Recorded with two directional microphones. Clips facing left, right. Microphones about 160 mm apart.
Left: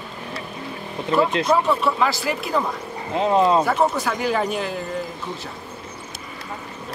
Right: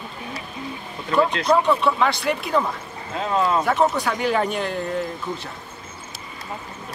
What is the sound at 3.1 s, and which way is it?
Speech, 25° left (ahead or behind).